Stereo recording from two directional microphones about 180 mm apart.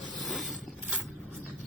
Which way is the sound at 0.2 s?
Centre (ahead or behind).